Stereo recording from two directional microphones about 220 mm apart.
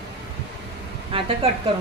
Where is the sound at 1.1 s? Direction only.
25° right (ahead or behind).